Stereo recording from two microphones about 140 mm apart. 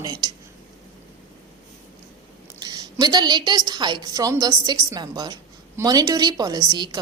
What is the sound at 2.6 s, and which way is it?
A woman's voice, 30° right (ahead or behind).